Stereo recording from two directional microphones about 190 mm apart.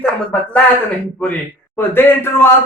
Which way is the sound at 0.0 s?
10° left (ahead or behind).